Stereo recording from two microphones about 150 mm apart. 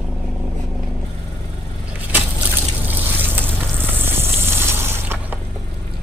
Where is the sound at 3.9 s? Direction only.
15° right (ahead or behind).